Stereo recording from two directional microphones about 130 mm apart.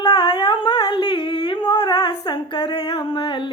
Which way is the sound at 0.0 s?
35° left (ahead or behind).